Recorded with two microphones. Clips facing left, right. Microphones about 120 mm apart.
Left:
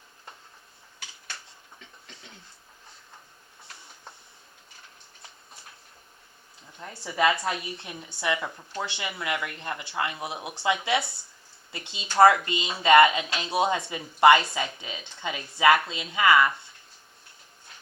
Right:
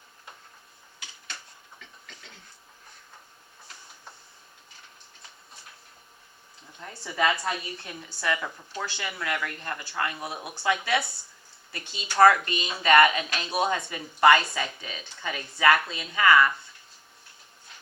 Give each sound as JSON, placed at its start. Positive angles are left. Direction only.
{"t": 6.8, "sound": "speech", "side_deg": 20}